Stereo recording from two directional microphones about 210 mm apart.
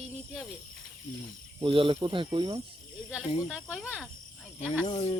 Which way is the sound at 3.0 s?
5° right (ahead or behind).